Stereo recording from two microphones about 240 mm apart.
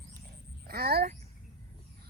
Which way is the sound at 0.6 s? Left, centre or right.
Right.